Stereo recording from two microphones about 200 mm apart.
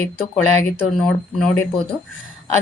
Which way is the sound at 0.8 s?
5° left (ahead or behind).